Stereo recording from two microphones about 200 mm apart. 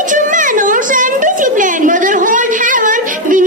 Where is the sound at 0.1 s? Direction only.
40° right (ahead or behind).